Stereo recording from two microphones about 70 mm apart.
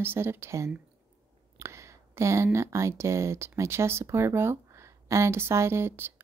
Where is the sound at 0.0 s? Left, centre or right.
Right.